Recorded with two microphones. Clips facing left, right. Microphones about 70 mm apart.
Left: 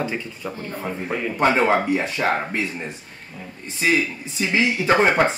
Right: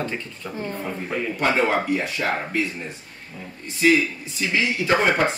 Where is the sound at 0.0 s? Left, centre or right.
Centre.